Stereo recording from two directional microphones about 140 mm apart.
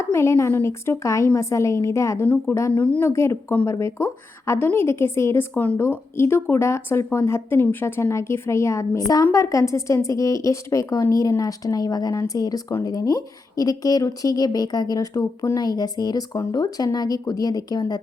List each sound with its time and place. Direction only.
0.0 s speech: 20° left (ahead or behind)